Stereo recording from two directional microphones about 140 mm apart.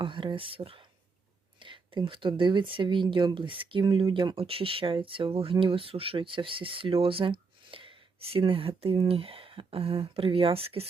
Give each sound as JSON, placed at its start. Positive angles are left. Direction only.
{"t": 0.0, "sound": "speech", "side_deg": -35}